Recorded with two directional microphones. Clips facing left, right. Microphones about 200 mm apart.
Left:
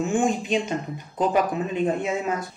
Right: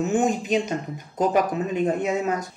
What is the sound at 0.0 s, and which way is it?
Speech, 40° right (ahead or behind).